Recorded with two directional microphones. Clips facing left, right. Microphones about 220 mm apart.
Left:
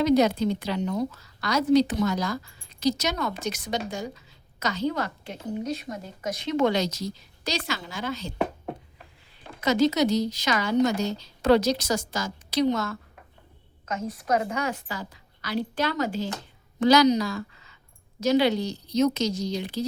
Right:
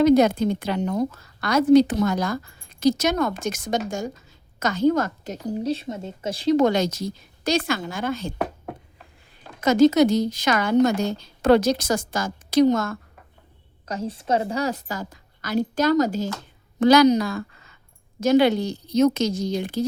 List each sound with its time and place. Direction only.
0.0 s a woman's voice: 50° right (ahead or behind)
9.6 s a woman's voice: 50° right (ahead or behind)
13.8 s a woman's voice: 30° right (ahead or behind)
16.8 s a woman's voice: 55° right (ahead or behind)